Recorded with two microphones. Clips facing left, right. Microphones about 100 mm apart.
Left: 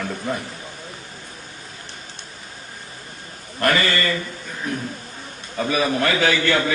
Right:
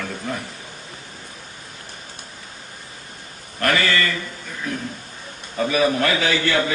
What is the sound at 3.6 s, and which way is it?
Speech, 40° left (ahead or behind).